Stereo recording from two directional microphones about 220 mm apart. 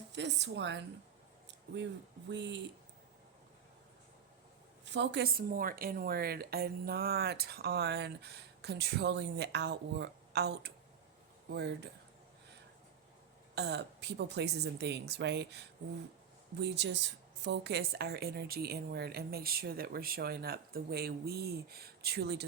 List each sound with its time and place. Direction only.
0.1 s a woman's voice: 50° right (ahead or behind)
1.5 s a sound: 55° right (ahead or behind)
2.3 s a woman's voice: 55° right (ahead or behind)
4.9 s a woman's voice: 50° right (ahead or behind)
13.6 s a woman's voice: 50° right (ahead or behind)